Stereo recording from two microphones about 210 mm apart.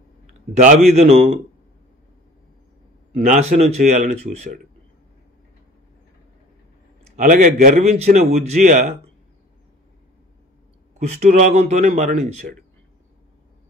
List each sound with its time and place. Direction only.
0.6 s a man's voice: 35° right (ahead or behind)
3.2 s a man's voice: 35° right (ahead or behind)
7.2 s a man's voice: 40° right (ahead or behind)
11.0 s a man's voice: 35° right (ahead or behind)